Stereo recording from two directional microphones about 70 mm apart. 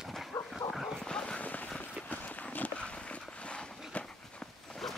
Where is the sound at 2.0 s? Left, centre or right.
Left.